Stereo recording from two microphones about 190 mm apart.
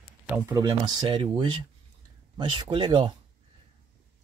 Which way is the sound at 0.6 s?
25° right (ahead or behind).